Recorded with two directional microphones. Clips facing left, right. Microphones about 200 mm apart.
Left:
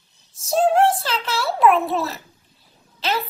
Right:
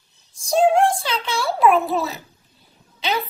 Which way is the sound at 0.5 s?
5° left (ahead or behind).